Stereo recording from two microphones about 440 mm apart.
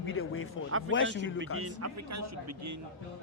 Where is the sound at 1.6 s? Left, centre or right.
Right.